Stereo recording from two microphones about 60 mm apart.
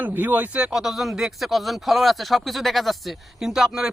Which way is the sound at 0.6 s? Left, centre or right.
Centre.